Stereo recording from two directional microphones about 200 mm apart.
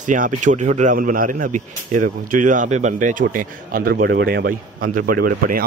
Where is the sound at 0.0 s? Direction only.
40° right (ahead or behind).